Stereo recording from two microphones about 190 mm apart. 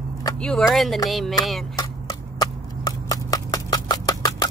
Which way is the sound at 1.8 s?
20° left (ahead or behind).